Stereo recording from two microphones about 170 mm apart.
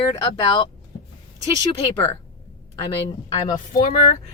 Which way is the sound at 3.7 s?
50° left (ahead or behind).